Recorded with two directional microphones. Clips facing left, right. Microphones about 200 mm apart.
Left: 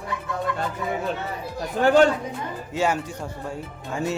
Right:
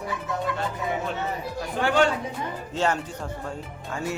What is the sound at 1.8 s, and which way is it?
Speech, 40° left (ahead or behind).